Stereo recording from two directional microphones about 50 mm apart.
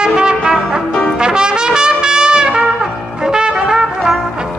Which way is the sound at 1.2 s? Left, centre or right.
Centre.